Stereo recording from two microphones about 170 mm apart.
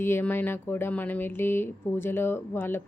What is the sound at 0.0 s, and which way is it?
A woman's voice, 10° left (ahead or behind).